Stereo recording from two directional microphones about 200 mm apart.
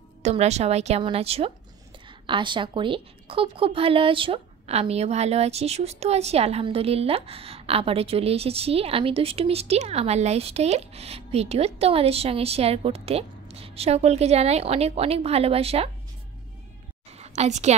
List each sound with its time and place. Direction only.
0.2 s a woman's voice: 35° right (ahead or behind)
17.2 s a woman's voice: 35° right (ahead or behind)